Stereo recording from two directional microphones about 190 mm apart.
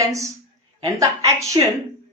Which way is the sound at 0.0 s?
15° right (ahead or behind).